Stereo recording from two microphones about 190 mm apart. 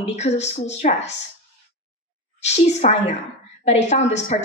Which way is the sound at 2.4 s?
35° left (ahead or behind).